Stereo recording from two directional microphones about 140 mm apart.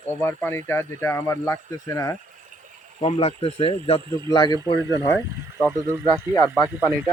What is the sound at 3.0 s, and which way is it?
Speech, 40° left (ahead or behind).